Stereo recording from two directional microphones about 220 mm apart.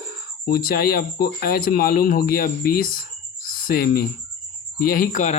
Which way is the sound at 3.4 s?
40° left (ahead or behind).